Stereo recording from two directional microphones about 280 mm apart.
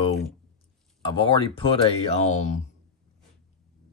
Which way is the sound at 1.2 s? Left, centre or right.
Centre.